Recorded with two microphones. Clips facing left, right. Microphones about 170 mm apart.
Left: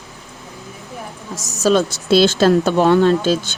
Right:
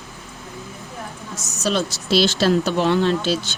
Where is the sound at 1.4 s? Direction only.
40° left (ahead or behind).